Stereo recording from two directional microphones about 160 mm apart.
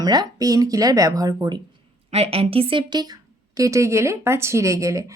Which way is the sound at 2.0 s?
40° right (ahead or behind).